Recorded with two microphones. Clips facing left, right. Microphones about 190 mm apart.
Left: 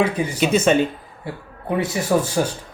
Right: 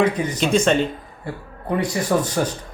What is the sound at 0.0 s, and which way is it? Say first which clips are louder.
Speech: even; 10° left (ahead or behind).